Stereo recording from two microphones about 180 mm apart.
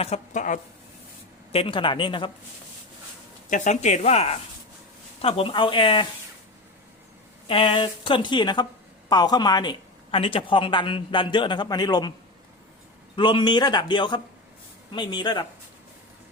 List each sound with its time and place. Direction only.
0.0 s a woman's voice: 40° left (ahead or behind)
1.5 s speech: 30° left (ahead or behind)
3.5 s speech: 40° left (ahead or behind)
7.4 s speech: 30° left (ahead or behind)
13.1 s speech: 25° left (ahead or behind)